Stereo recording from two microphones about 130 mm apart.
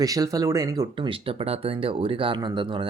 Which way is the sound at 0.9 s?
40° right (ahead or behind).